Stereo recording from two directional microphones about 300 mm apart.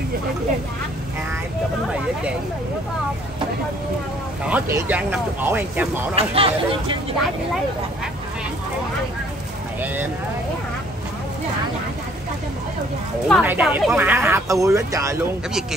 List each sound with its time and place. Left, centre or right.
4.5 s speech: centre
6.1 s speech: centre
13.3 s speech: centre